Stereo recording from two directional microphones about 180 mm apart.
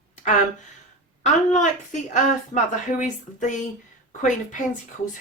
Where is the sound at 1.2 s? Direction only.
45° left (ahead or behind).